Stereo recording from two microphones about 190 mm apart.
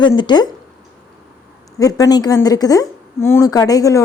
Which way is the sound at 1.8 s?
20° left (ahead or behind).